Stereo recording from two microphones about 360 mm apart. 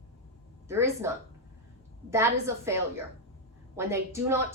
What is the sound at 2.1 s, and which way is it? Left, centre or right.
A woman's voice, centre.